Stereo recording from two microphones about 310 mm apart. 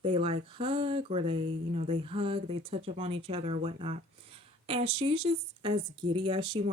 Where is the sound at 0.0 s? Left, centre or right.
Centre.